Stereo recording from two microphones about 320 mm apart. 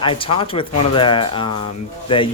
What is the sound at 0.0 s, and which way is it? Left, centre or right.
Speech, centre.